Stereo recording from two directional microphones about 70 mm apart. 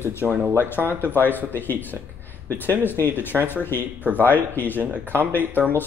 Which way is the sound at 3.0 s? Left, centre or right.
Left.